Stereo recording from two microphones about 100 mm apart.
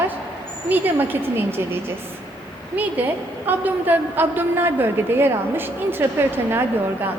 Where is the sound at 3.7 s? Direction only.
20° right (ahead or behind).